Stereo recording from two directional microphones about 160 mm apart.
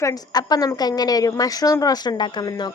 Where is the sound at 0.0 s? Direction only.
25° left (ahead or behind).